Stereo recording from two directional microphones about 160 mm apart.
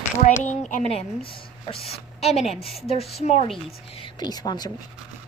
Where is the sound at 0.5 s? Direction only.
50° left (ahead or behind).